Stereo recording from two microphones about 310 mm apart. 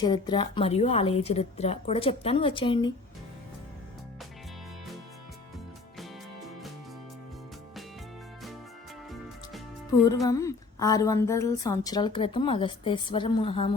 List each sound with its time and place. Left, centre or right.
0.0 s a woman's voice: centre
10.1 s a woman's voice: centre